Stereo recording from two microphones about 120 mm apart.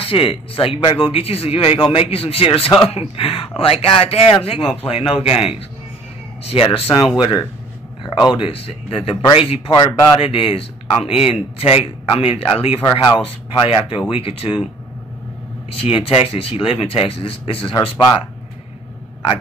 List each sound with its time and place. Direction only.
0.0 s speech: 50° left (ahead or behind)
15.7 s speech: 50° left (ahead or behind)
17.8 s speech: 40° left (ahead or behind)